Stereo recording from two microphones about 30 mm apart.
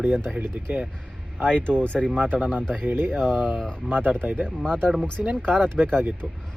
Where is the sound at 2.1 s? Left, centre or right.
Right.